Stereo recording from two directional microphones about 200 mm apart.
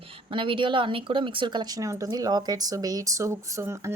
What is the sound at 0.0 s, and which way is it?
Speech, 25° right (ahead or behind).